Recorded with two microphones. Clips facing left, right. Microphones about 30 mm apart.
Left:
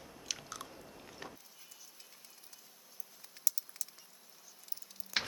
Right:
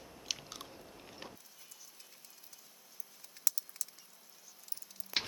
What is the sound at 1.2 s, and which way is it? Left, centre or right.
Power windows, centre.